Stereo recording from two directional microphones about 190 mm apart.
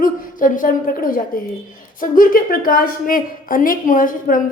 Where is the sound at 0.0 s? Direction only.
45° left (ahead or behind).